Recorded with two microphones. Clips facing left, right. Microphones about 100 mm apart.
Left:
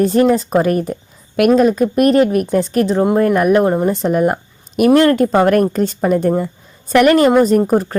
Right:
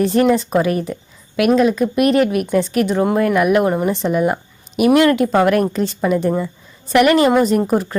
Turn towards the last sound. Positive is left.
turn(degrees=40)  # may be behind; listen again after turning